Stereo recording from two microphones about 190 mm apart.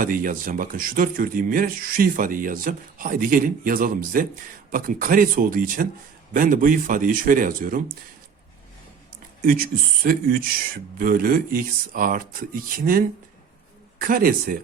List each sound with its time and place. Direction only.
0.0 s speech: 45° right (ahead or behind)
9.4 s speech: 50° right (ahead or behind)